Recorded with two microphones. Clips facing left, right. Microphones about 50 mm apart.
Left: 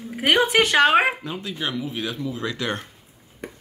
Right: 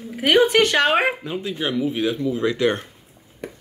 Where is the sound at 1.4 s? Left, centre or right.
Centre.